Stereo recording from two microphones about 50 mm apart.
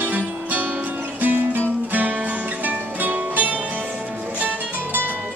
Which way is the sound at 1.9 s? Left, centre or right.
Right.